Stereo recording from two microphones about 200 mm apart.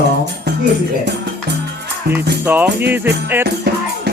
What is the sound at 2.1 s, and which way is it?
Music, 50° right (ahead or behind).